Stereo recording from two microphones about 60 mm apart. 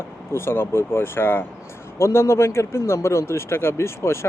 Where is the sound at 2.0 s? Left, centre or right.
Left.